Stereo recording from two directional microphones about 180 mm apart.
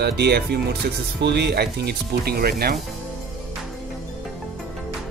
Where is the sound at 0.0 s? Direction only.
65° right (ahead or behind).